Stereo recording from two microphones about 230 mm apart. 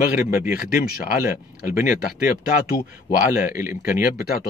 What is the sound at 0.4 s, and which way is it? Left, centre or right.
Speech, left.